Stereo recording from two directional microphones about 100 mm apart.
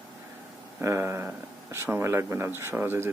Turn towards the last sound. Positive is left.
turn(degrees=-20)  # may be behind; listen again after turning